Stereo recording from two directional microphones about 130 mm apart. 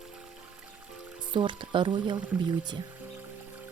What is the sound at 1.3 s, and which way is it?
Speech, 40° right (ahead or behind).